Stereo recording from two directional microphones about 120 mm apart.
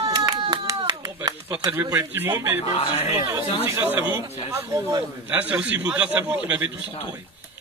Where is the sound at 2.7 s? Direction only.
55° left (ahead or behind).